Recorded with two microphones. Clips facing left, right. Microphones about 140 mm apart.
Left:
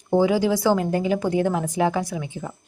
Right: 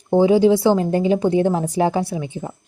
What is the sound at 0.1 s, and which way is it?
Speech, 25° right (ahead or behind).